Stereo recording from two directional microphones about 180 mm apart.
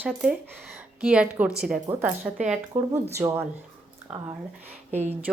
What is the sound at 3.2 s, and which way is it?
Speech, 10° right (ahead or behind).